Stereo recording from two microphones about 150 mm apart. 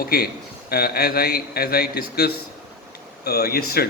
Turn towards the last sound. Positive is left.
turn(degrees=90)